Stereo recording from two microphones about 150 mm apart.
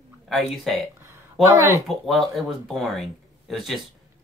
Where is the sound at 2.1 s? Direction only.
Centre (ahead or behind).